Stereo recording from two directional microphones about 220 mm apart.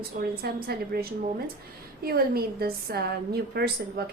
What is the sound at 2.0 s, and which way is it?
A woman's voice, 45° right (ahead or behind).